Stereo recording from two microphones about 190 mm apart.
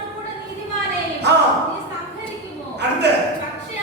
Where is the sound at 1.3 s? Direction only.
65° right (ahead or behind).